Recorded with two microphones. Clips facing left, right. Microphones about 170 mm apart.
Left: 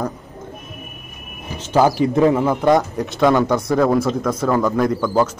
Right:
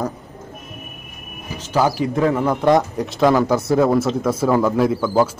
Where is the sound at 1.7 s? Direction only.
20° left (ahead or behind).